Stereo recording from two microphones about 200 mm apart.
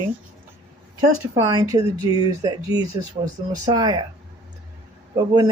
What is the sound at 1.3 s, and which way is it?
Speech, 15° right (ahead or behind).